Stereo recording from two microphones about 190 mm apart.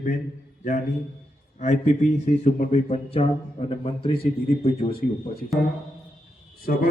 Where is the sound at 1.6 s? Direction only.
40° left (ahead or behind).